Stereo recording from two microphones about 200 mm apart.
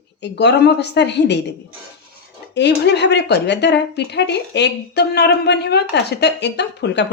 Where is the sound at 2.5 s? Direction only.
60° left (ahead or behind).